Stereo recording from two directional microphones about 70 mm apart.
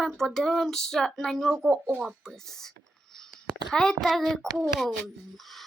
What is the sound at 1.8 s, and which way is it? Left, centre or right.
Speech, centre.